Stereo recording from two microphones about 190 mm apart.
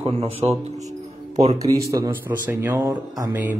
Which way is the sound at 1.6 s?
15° right (ahead or behind).